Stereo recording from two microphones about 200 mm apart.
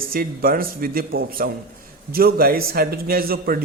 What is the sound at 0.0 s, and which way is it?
A man's voice, 45° right (ahead or behind).